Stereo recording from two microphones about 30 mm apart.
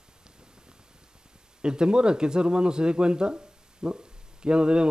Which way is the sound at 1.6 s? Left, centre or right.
Right.